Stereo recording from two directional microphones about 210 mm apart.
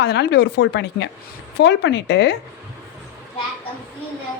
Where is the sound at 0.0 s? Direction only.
55° left (ahead or behind).